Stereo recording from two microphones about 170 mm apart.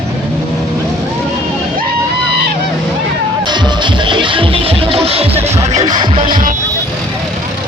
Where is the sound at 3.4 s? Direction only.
25° right (ahead or behind).